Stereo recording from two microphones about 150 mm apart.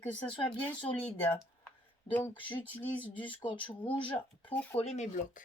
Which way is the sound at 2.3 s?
35° left (ahead or behind).